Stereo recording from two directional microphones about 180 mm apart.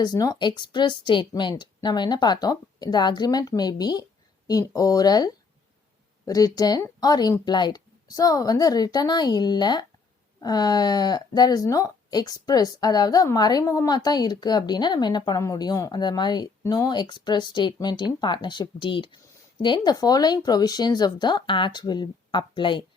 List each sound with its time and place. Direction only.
0.0 s speech: 20° left (ahead or behind)